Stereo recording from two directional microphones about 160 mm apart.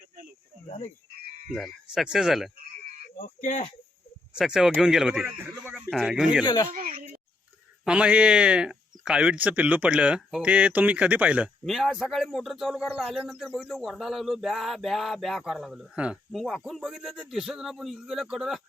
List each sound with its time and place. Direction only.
1.5 s speech: centre (ahead or behind)
3.2 s speech: 50° left (ahead or behind)
4.4 s speech: 5° right (ahead or behind)
5.9 s speech: centre (ahead or behind)
6.4 s speech: 25° left (ahead or behind)
6.7 s a sound: 55° right (ahead or behind)
7.9 s speech: 5° right (ahead or behind)